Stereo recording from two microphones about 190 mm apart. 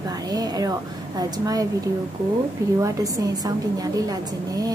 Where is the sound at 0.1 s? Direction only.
20° right (ahead or behind).